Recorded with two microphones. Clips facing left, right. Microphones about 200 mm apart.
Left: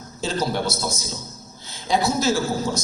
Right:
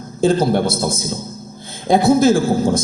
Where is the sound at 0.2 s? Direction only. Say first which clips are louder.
Right 10 dB; 55° right (ahead or behind).